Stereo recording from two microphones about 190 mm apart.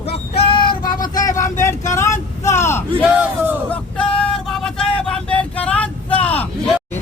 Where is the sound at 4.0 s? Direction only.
5° left (ahead or behind).